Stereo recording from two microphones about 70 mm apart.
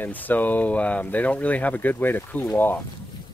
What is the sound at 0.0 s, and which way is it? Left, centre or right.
Speech, left.